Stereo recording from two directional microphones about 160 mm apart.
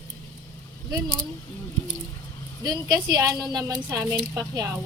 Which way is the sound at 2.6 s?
25° right (ahead or behind).